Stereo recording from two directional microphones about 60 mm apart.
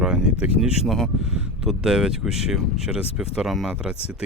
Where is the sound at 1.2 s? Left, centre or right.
Centre.